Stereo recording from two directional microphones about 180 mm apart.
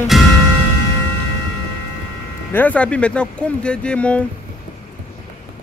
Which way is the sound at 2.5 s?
5° left (ahead or behind).